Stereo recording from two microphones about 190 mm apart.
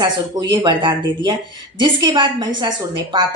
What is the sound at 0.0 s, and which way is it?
Speech, 20° right (ahead or behind).